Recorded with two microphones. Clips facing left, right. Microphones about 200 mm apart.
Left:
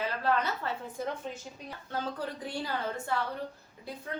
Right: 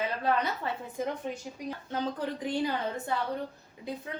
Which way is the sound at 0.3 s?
15° right (ahead or behind).